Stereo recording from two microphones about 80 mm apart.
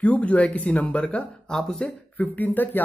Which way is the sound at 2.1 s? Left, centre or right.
Left.